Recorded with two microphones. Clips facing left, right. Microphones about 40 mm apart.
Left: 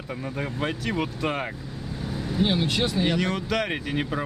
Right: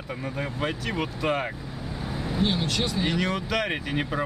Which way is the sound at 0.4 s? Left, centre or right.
Centre.